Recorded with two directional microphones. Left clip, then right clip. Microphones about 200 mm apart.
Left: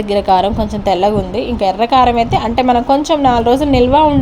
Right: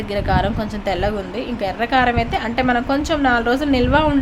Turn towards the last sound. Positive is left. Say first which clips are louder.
# left 6 dB
turn(degrees=20)  # may be behind; listen again after turning